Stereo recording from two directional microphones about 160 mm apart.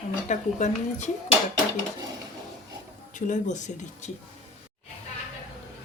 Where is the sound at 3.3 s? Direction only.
50° left (ahead or behind).